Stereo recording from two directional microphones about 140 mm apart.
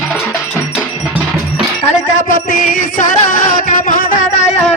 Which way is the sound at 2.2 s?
70° left (ahead or behind).